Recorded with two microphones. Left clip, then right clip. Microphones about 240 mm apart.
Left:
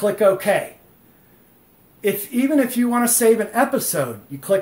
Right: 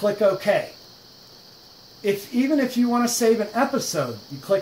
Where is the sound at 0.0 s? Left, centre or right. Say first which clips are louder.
Left 3 dB; left.